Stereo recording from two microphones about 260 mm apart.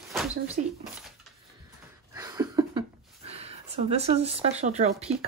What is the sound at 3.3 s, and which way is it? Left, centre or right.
Speech, right.